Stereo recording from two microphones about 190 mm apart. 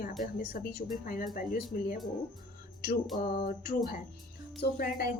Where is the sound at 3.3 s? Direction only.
55° left (ahead or behind).